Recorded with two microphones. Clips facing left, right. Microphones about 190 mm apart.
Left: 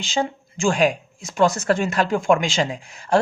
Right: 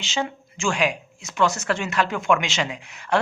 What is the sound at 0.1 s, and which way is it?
Speech, 35° left (ahead or behind).